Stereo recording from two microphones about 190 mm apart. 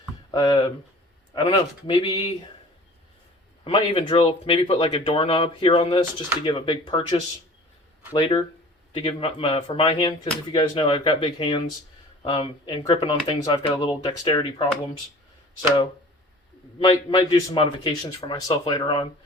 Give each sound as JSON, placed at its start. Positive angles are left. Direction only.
{"t": 0.3, "sound": "speech", "side_deg": 20}
{"t": 3.6, "sound": "speech", "side_deg": 25}
{"t": 16.8, "sound": "speech", "side_deg": 25}